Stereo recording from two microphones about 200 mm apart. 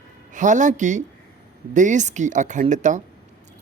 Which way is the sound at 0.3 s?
40° right (ahead or behind).